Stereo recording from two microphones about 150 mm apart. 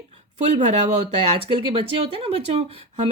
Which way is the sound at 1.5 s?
35° right (ahead or behind).